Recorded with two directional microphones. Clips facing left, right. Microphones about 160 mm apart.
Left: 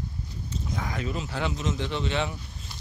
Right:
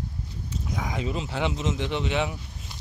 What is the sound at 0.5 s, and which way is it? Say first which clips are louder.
Speech: right 1 dB; 15° right (ahead or behind).